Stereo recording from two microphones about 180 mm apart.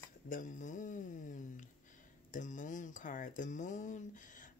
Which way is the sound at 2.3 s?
45° left (ahead or behind).